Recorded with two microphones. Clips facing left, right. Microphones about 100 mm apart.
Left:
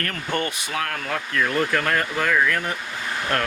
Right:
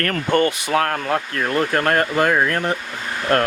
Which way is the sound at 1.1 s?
35° right (ahead or behind).